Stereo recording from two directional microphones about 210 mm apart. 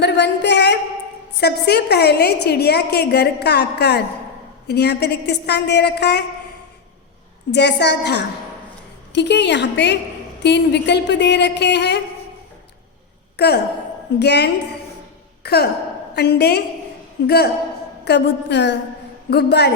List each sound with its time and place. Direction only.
0.0 s a sound: 55° left (ahead or behind)
1.4 s a woman's voice: 50° left (ahead or behind)
7.5 s a woman's voice: 55° left (ahead or behind)
13.3 s a woman's voice: 50° left (ahead or behind)